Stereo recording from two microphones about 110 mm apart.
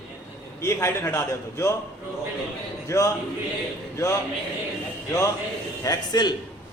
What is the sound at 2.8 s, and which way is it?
A man's voice, 30° left (ahead or behind).